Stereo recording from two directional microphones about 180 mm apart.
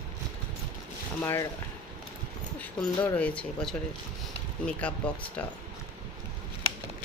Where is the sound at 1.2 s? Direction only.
15° left (ahead or behind).